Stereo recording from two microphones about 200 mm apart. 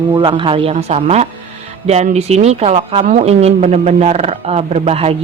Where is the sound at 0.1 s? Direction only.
25° right (ahead or behind).